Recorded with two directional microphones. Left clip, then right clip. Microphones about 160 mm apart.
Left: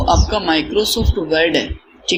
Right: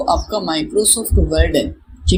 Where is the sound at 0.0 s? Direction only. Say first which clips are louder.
Left 1 dB; 5° right (ahead or behind).